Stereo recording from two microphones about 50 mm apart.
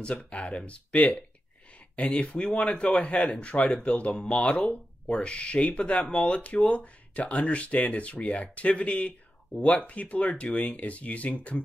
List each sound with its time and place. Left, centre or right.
0.0 s speech: left